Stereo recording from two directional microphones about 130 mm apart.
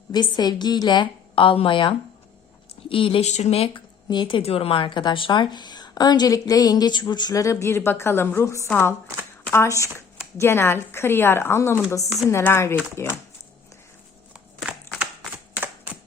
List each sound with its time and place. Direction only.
0.1 s speech: 30° left (ahead or behind)
3.2 s speech: 60° left (ahead or behind)
4.1 s speech: 40° left (ahead or behind); by 13.1 s 20° left (ahead or behind)
14.6 s a sound: 5° right (ahead or behind)